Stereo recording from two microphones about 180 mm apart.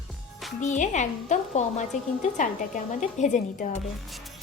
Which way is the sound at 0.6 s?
45° left (ahead or behind).